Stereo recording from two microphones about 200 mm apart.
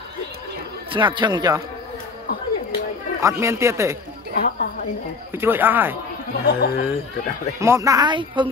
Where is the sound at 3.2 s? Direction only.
15° right (ahead or behind).